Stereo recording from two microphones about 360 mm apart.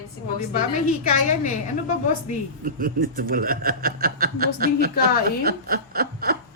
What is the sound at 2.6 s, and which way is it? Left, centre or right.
Speech, right.